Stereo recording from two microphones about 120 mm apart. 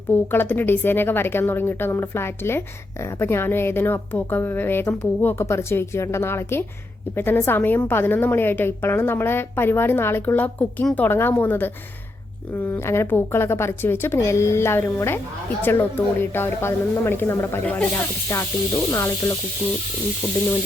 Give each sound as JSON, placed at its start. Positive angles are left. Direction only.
{"t": 0.1, "sound": "a woman's voice", "side_deg": 15}